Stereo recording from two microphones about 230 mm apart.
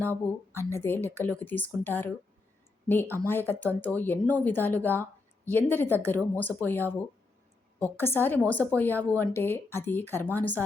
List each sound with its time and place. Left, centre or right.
0.0 s speech: centre